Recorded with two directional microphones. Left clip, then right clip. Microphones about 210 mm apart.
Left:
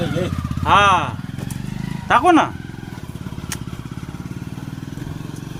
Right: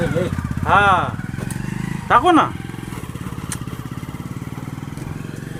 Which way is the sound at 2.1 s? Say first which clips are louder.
Even; 15° left (ahead or behind).